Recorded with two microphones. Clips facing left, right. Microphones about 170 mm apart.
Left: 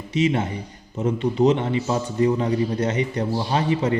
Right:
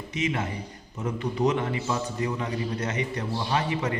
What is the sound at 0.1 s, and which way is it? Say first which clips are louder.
A man's voice: left 8 dB; 30° left (ahead or behind).